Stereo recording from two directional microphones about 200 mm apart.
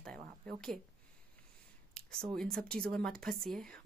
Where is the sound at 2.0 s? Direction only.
5° left (ahead or behind).